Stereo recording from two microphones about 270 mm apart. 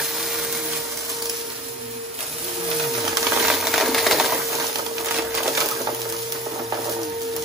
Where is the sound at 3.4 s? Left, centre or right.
Centre.